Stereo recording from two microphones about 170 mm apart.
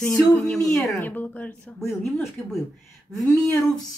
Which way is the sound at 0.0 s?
15° left (ahead or behind).